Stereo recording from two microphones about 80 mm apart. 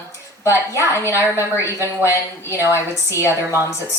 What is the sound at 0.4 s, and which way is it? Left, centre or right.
A woman's voice, left.